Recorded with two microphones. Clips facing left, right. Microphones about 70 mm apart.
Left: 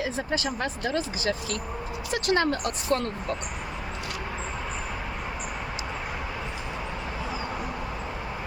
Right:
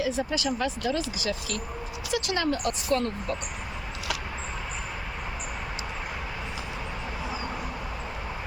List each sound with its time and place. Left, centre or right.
0.0 s speech: left